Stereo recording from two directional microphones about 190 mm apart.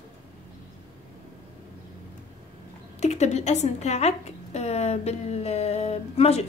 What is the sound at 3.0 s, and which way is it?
A woman's voice, 35° left (ahead or behind).